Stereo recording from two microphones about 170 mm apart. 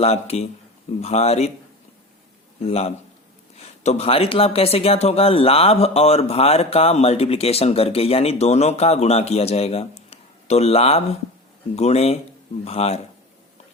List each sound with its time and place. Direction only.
0.0 s speech: 40° left (ahead or behind)
2.6 s speech: 40° left (ahead or behind)